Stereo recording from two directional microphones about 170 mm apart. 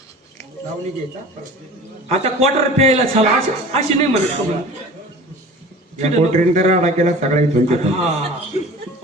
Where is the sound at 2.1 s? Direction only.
40° right (ahead or behind).